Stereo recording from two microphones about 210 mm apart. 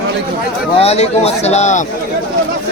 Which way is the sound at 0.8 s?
30° left (ahead or behind).